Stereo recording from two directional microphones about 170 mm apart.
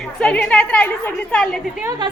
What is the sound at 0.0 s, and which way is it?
A woman's voice, 5° left (ahead or behind).